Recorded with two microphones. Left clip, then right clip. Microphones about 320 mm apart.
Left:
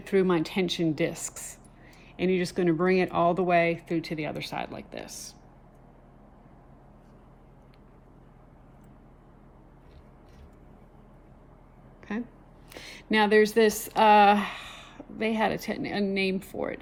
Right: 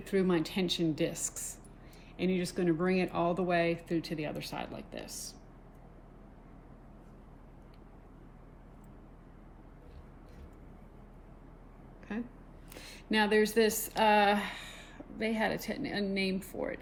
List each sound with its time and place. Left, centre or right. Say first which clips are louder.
0.0 s speech: left 6 dB; left
12.1 s speech: left 5 dB; left